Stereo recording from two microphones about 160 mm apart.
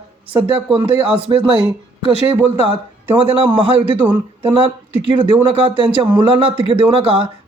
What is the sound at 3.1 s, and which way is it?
Speech, 35° right (ahead or behind).